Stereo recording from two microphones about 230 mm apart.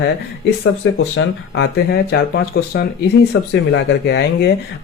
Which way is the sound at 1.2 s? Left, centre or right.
Left.